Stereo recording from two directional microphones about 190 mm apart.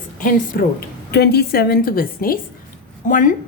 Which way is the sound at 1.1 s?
60° left (ahead or behind).